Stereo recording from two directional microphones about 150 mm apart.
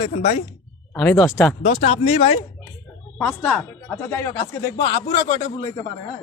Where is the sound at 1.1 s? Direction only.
20° left (ahead or behind).